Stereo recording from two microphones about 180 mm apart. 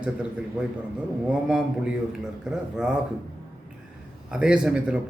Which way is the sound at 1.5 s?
5° right (ahead or behind).